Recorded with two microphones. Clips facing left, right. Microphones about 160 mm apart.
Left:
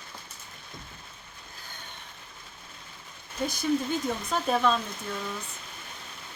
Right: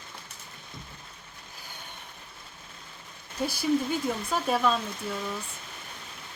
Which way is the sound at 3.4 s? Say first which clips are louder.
Right 1 dB; 10° right (ahead or behind).